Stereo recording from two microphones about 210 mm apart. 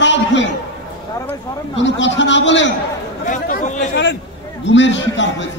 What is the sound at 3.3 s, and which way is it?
Chatter, 40° left (ahead or behind).